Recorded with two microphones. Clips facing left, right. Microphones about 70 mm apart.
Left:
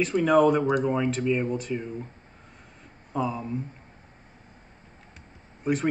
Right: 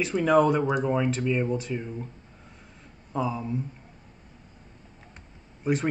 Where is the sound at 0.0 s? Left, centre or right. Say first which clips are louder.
Left 1 dB; centre.